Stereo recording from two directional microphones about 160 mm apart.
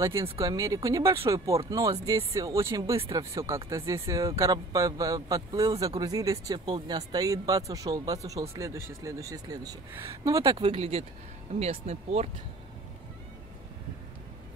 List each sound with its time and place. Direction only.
0.0 s a man's voice: 20° right (ahead or behind)
10.6 s speech: 40° right (ahead or behind)